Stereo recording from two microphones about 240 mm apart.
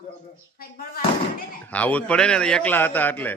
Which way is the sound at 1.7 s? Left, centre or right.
Centre.